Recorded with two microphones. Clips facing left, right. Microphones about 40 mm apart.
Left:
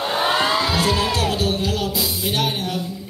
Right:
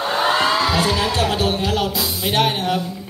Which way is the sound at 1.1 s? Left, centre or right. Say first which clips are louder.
Right 2 dB; right.